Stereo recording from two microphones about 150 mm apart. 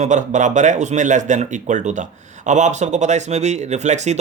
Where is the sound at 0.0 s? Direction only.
50° right (ahead or behind).